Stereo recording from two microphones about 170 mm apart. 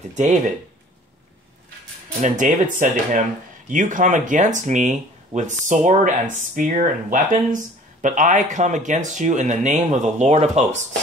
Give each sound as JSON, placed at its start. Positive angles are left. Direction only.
{"t": 0.1, "sound": "speech", "side_deg": -45}
{"t": 2.2, "sound": "speech", "side_deg": -50}